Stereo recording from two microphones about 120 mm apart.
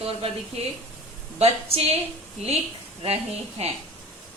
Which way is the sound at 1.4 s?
55° right (ahead or behind).